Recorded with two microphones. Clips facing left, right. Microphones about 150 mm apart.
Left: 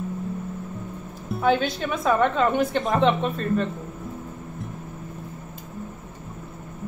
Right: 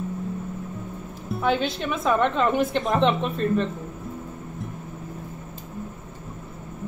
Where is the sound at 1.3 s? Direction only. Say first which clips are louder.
Left 2 dB; centre (ahead or behind).